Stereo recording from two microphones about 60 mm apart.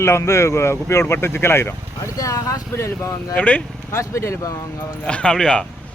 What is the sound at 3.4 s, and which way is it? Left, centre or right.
Speech, left.